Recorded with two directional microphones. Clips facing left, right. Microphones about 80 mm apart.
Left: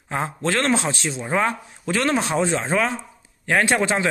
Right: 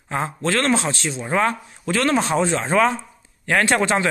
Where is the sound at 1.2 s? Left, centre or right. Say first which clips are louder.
Right 2 dB; centre.